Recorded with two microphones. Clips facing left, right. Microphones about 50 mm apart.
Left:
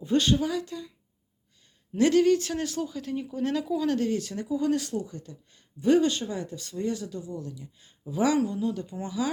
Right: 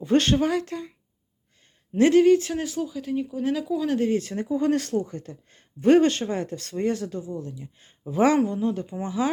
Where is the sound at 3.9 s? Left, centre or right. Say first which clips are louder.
Right 4 dB; right.